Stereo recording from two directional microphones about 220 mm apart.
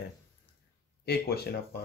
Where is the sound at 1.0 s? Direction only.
45° left (ahead or behind).